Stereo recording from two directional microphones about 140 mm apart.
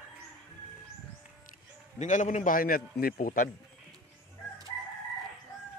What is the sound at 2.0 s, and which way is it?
A man's voice, 60° left (ahead or behind).